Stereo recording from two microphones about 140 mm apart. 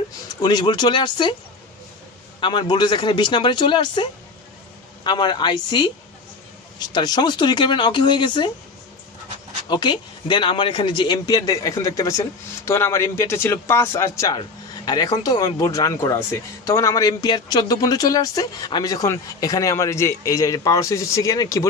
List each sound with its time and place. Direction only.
0.3 s speech: 30° left (ahead or behind)
2.4 s speech: 35° left (ahead or behind)
9.7 s speech: 35° left (ahead or behind)